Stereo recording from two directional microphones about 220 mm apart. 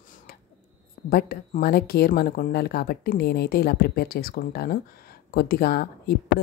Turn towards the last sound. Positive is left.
turn(degrees=45)  # may be behind; listen again after turning